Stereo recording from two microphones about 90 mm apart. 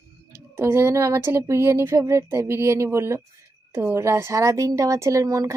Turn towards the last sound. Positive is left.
turn(degrees=-40)  # may be behind; listen again after turning